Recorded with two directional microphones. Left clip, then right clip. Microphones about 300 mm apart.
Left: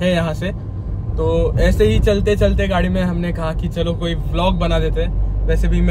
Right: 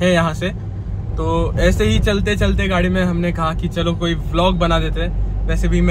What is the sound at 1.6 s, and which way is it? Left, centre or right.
Speech, centre.